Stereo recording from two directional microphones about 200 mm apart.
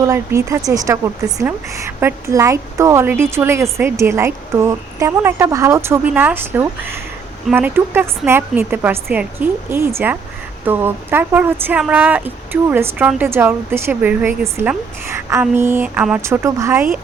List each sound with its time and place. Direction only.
0.0 s speech: 15° right (ahead or behind)